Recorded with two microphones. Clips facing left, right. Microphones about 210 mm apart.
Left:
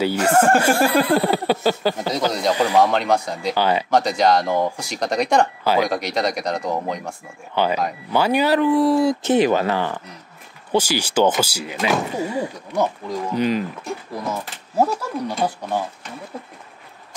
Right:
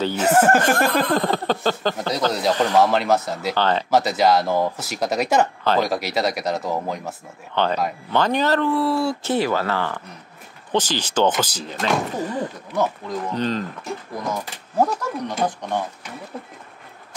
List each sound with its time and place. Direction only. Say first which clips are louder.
0.2 s speech: right 1 dB; 5° right (ahead or behind)
0.6 s speech: left 2 dB; 10° left (ahead or behind)
2.0 s speech: left 1 dB; centre (ahead or behind)
2.5 s speech: left 1 dB; 10° left (ahead or behind)
2.8 s speech: even; 5° right (ahead or behind)
3.5 s speech: left 1 dB; 10° left (ahead or behind)
3.9 s speech: even; 5° right (ahead or behind)
5.6 s speech: left 1 dB; 10° left (ahead or behind)
5.9 s speech: even; 5° right (ahead or behind)
7.5 s speech: left 1 dB; 10° left (ahead or behind)
14.8 s speech: left 1 dB; 10° left (ahead or behind)